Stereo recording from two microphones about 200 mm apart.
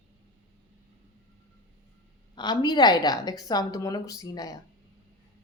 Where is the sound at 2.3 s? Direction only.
20° left (ahead or behind).